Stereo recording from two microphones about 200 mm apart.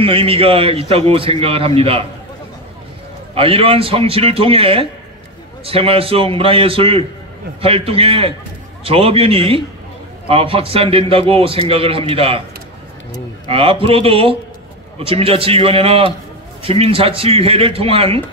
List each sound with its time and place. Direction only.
0.0 s a man's voice: 25° right (ahead or behind)
3.3 s a man's voice: 30° right (ahead or behind)
13.5 s a man's voice: 30° right (ahead or behind)